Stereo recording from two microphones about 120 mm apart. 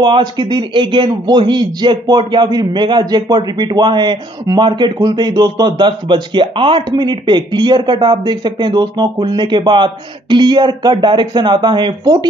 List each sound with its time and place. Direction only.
0.0 s speech: 40° right (ahead or behind)